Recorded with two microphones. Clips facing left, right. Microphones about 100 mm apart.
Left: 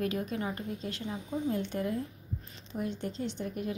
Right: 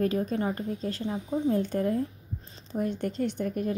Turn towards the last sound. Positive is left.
turn(degrees=-50)  # may be behind; listen again after turning